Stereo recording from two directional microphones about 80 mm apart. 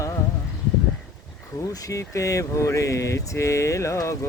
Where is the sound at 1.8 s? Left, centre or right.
Left.